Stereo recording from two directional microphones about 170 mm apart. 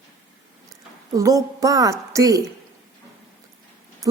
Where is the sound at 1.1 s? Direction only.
20° right (ahead or behind).